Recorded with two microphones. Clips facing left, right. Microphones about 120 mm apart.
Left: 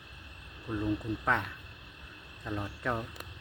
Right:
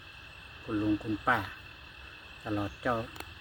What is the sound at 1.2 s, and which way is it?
Speech, 5° right (ahead or behind).